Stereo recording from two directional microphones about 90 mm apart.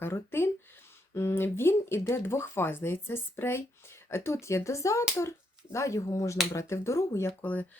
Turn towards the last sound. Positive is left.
turn(degrees=20)  # may be behind; listen again after turning